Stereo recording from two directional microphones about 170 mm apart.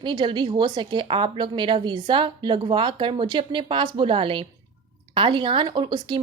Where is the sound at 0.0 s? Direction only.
25° right (ahead or behind).